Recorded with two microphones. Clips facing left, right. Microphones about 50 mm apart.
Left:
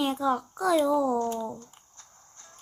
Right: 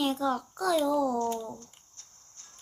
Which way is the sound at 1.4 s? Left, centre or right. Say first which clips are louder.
Left 5 dB; centre.